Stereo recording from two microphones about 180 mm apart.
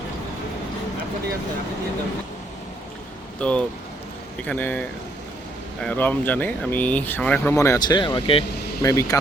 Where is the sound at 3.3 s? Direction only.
5° left (ahead or behind); by 8.4 s 30° left (ahead or behind).